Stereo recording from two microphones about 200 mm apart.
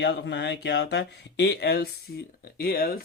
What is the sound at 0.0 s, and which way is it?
Speech, 60° left (ahead or behind).